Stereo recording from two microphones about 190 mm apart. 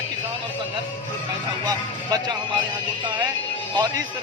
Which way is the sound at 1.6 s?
20° right (ahead or behind).